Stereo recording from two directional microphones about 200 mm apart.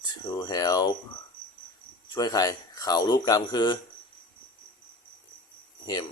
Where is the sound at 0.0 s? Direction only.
20° left (ahead or behind).